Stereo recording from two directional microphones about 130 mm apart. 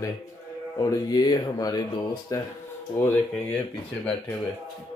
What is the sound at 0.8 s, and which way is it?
A man's voice, 30° left (ahead or behind).